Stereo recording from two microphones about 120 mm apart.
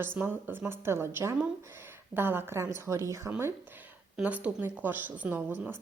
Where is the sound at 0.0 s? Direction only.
15° right (ahead or behind).